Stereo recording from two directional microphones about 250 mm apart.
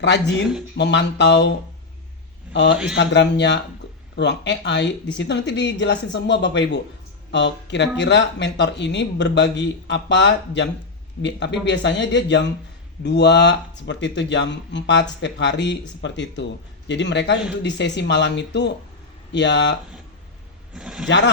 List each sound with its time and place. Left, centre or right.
0.0 s a man's voice: left
20.7 s speech: centre